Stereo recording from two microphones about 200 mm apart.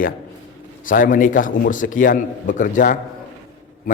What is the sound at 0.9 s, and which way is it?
A man's voice, 45° left (ahead or behind).